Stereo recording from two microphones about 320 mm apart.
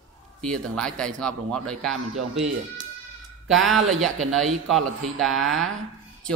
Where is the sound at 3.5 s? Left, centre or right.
Centre.